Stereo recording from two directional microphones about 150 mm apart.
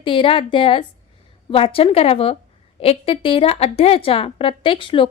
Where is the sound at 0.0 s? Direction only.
35° left (ahead or behind).